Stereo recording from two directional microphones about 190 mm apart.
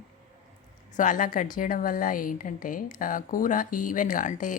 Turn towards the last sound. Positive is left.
turn(degrees=45)  # may be behind; listen again after turning